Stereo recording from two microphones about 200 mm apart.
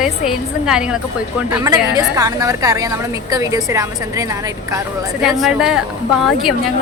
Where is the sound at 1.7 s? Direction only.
20° right (ahead or behind).